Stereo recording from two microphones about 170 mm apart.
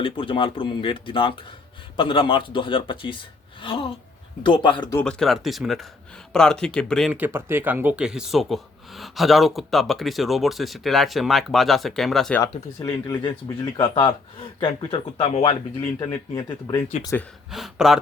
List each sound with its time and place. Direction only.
0.0 s speech: 30° left (ahead or behind)
4.9 s speech: 5° left (ahead or behind)
7.1 s speech: 10° right (ahead or behind)
12.8 s speech: 25° left (ahead or behind)
15.8 s speech: 20° left (ahead or behind)
17.5 s speech: centre (ahead or behind)